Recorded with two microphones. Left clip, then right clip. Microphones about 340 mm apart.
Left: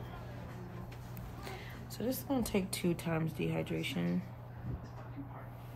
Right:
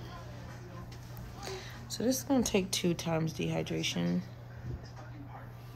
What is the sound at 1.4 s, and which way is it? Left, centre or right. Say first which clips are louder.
Speech: right 5 dB; centre.